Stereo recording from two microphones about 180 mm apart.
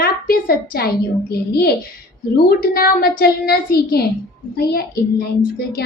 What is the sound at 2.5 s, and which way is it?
A woman's voice, 55° left (ahead or behind).